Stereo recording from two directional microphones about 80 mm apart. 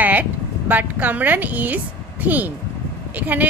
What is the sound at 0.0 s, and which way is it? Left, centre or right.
A woman's voice, right.